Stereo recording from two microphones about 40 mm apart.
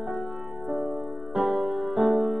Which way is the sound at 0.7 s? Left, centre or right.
Centre.